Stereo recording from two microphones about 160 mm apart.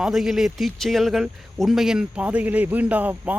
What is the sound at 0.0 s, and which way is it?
Speech, centre (ahead or behind).